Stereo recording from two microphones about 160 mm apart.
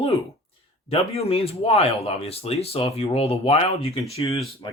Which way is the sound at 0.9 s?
40° left (ahead or behind).